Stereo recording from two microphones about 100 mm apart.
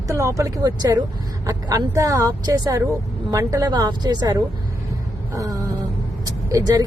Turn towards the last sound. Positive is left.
turn(degrees=-40)  # may be behind; listen again after turning